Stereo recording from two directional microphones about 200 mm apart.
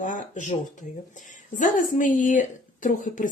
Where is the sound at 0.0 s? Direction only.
40° left (ahead or behind).